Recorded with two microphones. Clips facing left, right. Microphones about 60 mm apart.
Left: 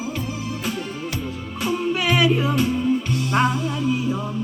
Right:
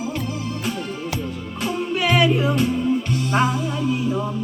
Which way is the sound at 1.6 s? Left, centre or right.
Centre.